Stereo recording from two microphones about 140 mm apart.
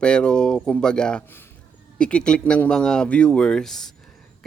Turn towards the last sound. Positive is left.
turn(degrees=5)  # may be behind; listen again after turning